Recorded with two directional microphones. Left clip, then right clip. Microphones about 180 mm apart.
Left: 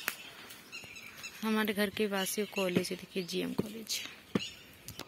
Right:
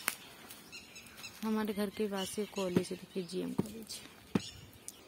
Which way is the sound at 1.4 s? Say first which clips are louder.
Left 5 dB; centre (ahead or behind).